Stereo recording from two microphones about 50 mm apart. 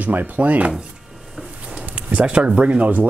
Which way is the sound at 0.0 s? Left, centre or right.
Right.